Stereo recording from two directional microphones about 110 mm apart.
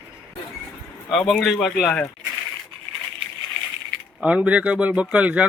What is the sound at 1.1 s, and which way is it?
Speech, centre (ahead or behind).